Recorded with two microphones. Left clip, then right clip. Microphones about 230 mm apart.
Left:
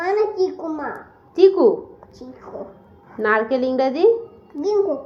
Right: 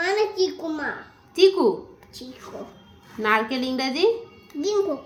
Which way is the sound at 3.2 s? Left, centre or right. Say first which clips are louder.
Left 4 dB; right.